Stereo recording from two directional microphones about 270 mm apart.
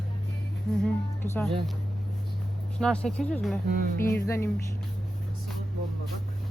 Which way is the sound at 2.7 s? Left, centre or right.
Centre.